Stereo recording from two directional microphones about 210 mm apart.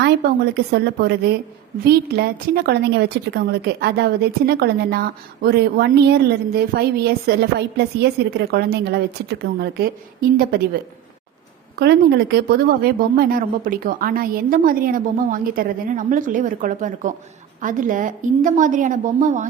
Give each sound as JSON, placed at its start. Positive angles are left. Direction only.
{"t": 0.5, "sound": "a woman's voice", "side_deg": -50}
{"t": 11.8, "sound": "speech", "side_deg": -50}